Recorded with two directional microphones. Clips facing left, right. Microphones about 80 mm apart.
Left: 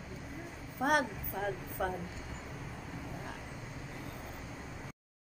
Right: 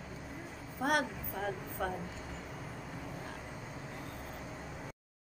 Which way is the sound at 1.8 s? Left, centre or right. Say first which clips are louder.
Left 2 dB; centre.